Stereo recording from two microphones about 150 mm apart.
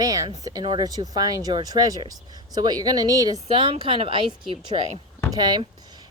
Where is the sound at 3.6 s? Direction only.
35° right (ahead or behind).